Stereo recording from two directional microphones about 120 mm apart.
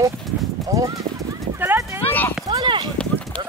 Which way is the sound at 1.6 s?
20° right (ahead or behind).